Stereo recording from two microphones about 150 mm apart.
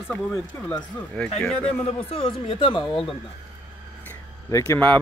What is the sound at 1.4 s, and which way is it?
Speech, 5° left (ahead or behind).